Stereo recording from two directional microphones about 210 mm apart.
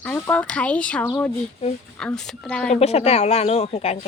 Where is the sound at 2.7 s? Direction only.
30° left (ahead or behind).